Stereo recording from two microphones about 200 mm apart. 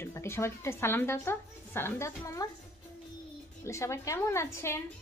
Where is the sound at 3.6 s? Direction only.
15° left (ahead or behind).